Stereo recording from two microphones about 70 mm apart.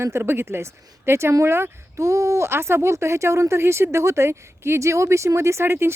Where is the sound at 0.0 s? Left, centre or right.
Right.